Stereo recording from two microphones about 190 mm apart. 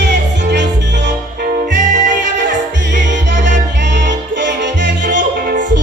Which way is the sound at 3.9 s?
70° right (ahead or behind).